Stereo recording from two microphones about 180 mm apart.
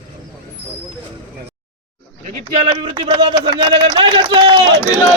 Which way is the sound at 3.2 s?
25° right (ahead or behind).